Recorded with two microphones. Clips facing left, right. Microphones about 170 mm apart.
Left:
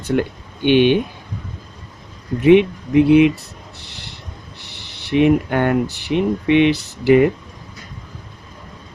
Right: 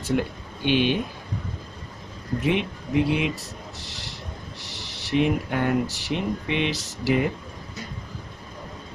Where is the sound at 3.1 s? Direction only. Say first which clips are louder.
Left 14 dB; 60° left (ahead or behind).